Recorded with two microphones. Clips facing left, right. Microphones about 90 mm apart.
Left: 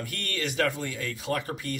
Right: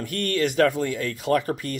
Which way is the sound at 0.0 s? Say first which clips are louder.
Right 9 dB; 45° right (ahead or behind).